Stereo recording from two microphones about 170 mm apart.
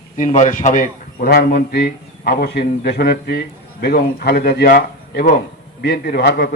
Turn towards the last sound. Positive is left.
turn(degrees=65)  # may be behind; listen again after turning